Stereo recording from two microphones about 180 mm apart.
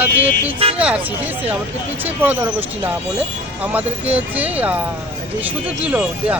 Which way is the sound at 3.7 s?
10° right (ahead or behind).